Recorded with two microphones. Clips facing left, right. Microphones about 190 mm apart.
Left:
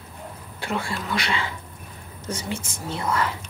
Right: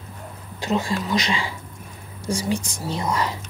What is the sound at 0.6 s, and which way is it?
Speech, 20° right (ahead or behind).